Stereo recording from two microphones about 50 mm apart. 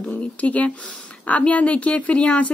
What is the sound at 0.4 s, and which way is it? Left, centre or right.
Speech, left.